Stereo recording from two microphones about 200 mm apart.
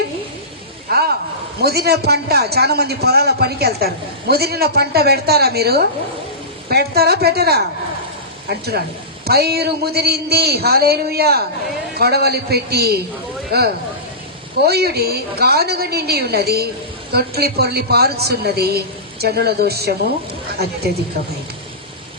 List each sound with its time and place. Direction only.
1.6 s a man's voice: 50° right (ahead or behind)